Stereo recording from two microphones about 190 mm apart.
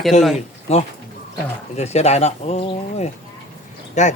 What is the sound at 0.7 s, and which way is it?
A man's voice, 35° left (ahead or behind).